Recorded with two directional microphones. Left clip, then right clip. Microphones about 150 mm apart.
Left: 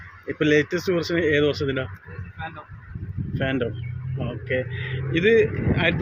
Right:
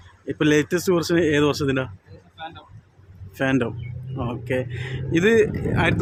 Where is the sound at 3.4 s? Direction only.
45° right (ahead or behind).